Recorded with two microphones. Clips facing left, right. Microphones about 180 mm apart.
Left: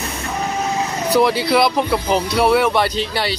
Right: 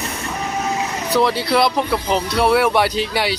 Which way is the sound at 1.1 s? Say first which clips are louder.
Left 2 dB; 10° left (ahead or behind).